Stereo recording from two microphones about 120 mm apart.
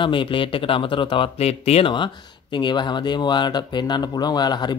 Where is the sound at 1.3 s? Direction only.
60° left (ahead or behind).